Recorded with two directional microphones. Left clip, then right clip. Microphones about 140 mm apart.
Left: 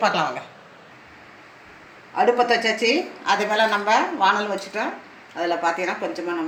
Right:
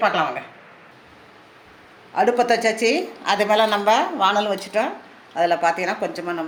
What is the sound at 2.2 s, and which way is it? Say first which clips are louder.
A woman's voice: even; 90° right.